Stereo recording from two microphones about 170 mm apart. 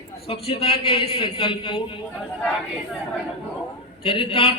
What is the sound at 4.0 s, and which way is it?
Speech, 30° left (ahead or behind).